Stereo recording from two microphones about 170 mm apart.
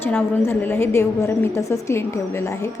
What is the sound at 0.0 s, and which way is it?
A woman's voice, 10° left (ahead or behind).